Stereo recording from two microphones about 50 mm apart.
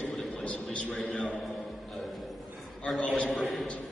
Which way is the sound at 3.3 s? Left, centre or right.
Centre.